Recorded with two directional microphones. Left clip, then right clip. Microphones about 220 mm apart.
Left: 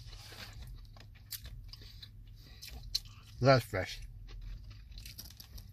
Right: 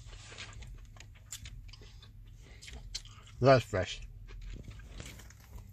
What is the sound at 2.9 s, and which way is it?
Chewing, 30° right (ahead or behind).